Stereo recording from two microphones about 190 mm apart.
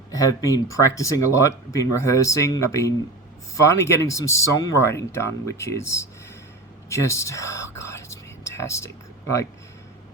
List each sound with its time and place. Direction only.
0.1 s speech: 20° left (ahead or behind)